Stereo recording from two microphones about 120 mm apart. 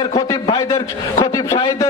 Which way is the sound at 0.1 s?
30° left (ahead or behind).